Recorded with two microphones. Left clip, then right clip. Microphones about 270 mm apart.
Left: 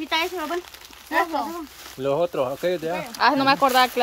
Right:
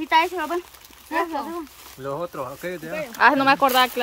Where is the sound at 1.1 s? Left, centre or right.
Centre.